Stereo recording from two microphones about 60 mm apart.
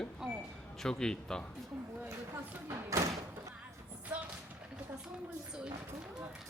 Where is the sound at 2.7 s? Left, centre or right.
Right.